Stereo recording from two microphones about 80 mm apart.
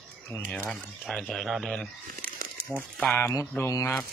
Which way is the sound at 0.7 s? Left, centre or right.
Centre.